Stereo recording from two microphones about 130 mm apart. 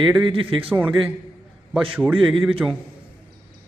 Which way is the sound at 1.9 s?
15° right (ahead or behind).